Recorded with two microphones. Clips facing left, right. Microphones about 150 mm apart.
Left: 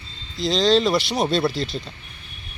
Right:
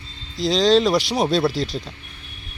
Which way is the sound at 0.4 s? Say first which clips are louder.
Right 2 dB; 40° right (ahead or behind).